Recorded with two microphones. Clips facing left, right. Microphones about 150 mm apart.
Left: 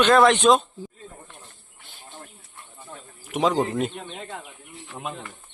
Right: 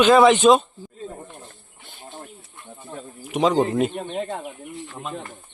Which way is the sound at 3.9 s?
45° right (ahead or behind).